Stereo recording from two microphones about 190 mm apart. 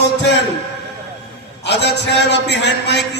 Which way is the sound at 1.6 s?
65° left (ahead or behind).